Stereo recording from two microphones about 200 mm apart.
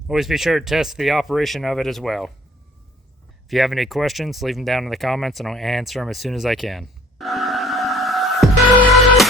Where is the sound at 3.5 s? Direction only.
Centre (ahead or behind).